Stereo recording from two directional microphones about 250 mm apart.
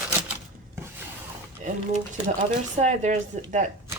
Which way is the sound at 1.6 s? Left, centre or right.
Right.